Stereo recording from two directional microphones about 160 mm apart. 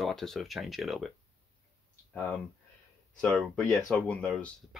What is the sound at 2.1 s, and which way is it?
Speech, 10° left (ahead or behind).